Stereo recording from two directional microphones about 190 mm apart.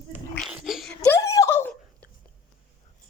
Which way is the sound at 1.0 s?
15° left (ahead or behind).